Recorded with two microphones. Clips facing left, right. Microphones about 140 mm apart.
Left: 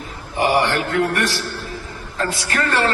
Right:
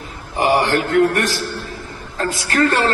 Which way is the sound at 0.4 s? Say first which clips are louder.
Right 2 dB; 45° right (ahead or behind).